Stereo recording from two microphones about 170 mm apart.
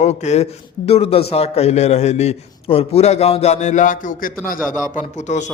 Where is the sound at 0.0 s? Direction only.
40° left (ahead or behind).